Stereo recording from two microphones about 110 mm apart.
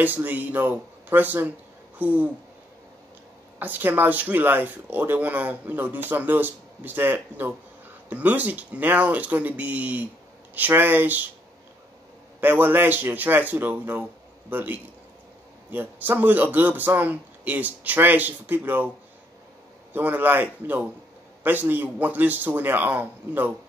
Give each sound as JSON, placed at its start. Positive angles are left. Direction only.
{"t": 0.0, "sound": "speech", "side_deg": -15}
{"t": 3.5, "sound": "speech", "side_deg": -15}
{"t": 12.4, "sound": "speech", "side_deg": -15}
{"t": 19.9, "sound": "speech", "side_deg": -15}